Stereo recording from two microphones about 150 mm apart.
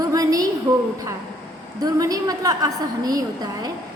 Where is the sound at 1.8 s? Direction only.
25° right (ahead or behind).